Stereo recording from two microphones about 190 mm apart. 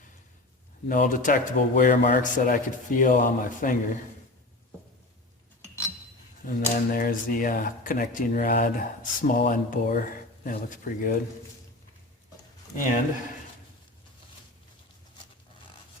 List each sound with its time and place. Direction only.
0.9 s speech: 45° left (ahead or behind)
6.4 s speech: 50° left (ahead or behind)